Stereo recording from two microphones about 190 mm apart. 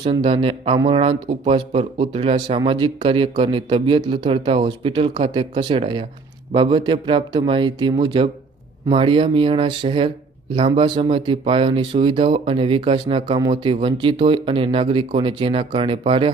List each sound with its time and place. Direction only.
0.0 s speech: 30° right (ahead or behind)